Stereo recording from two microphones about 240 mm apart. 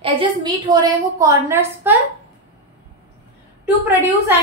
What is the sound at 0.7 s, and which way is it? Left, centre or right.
A woman's voice, centre.